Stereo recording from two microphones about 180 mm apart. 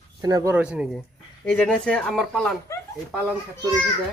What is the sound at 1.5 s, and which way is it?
Speech, 5° left (ahead or behind).